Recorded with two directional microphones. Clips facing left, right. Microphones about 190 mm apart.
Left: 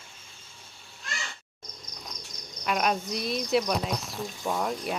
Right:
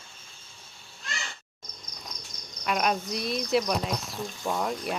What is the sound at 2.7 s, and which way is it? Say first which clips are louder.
Speech: even; centre (ahead or behind).